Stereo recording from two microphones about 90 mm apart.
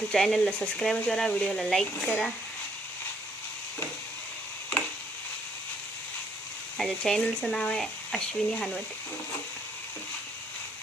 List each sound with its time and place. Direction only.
0.1 s speech: 5° left (ahead or behind)
6.7 s speech: 5° left (ahead or behind)